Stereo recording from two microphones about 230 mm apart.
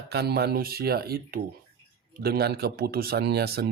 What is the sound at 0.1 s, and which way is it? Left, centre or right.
Speech, right.